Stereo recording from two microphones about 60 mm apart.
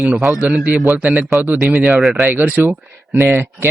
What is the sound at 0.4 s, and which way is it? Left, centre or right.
Speech, right.